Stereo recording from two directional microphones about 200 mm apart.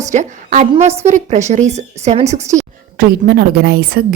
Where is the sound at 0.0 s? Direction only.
35° right (ahead or behind).